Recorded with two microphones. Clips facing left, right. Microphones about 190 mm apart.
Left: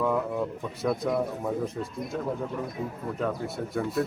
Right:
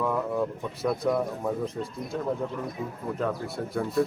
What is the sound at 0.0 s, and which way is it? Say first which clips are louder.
Speech: even; centre (ahead or behind).